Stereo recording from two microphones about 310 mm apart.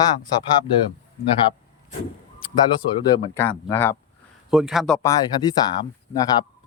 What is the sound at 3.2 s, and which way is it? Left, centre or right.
Speech, centre.